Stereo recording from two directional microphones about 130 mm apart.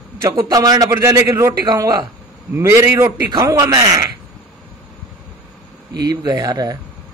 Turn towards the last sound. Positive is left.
turn(degrees=-30)  # may be behind; listen again after turning